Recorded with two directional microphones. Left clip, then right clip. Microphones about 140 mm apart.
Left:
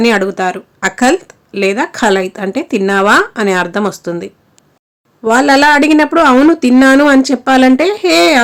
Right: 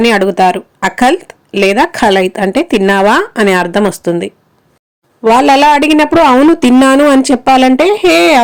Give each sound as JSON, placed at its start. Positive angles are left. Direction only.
{"t": 0.0, "sound": "speech", "side_deg": -20}
{"t": 5.2, "sound": "speech", "side_deg": -20}